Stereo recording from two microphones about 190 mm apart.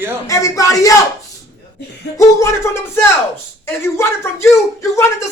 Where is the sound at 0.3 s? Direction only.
15° left (ahead or behind).